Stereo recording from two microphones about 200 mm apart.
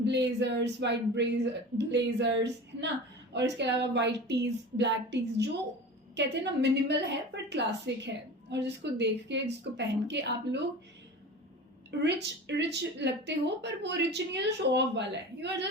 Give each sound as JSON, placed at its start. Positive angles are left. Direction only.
{"t": 0.0, "sound": "a woman's voice", "side_deg": -60}
{"t": 11.9, "sound": "a woman's voice", "side_deg": -60}